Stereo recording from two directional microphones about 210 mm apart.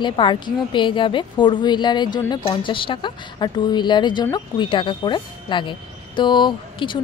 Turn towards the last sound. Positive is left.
turn(degrees=20)  # may be behind; listen again after turning